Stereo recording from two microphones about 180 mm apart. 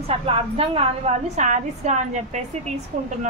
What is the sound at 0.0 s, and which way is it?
A woman's voice, 30° right (ahead or behind).